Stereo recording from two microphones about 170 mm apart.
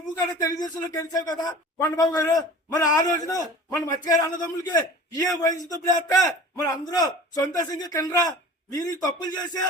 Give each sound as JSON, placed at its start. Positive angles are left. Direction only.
{"t": 0.6, "sound": "a man's voice", "side_deg": 20}